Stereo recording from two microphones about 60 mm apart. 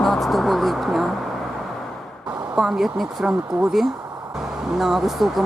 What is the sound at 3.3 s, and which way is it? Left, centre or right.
Speech, right.